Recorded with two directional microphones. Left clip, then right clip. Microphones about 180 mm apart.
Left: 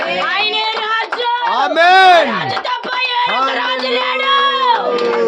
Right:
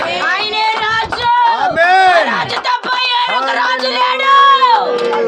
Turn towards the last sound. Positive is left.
turn(degrees=-25)  # may be behind; listen again after turning